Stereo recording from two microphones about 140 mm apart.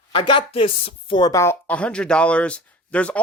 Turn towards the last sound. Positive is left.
turn(degrees=10)  # may be behind; listen again after turning